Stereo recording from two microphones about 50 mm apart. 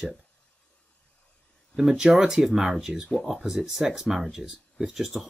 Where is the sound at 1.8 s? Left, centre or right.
Centre.